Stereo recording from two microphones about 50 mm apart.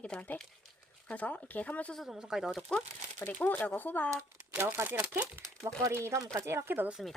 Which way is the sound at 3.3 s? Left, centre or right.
Left.